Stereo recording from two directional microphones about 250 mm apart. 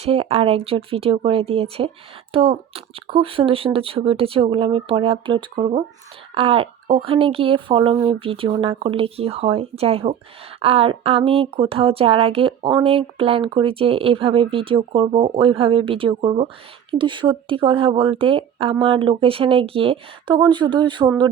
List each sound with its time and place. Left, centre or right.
0.0 s speech: right